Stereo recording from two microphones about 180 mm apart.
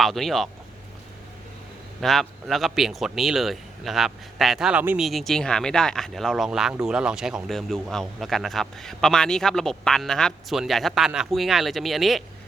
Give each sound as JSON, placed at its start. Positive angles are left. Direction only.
{"t": 0.0, "sound": "speech", "side_deg": 0}
{"t": 2.0, "sound": "speech", "side_deg": 0}